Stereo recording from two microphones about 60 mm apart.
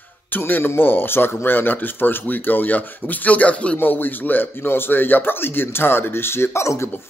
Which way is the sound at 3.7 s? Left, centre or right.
Left.